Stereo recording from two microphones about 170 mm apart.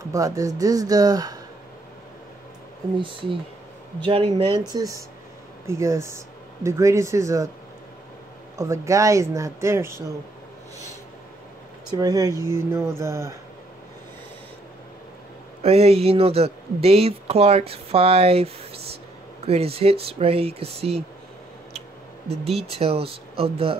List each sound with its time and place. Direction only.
0.1 s speech: 20° right (ahead or behind)
4.0 s speech: 30° right (ahead or behind)
8.5 s speech: 20° right (ahead or behind)
12.0 s speech: 20° right (ahead or behind)
15.6 s speech: 35° right (ahead or behind)
22.6 s speech: 35° right (ahead or behind)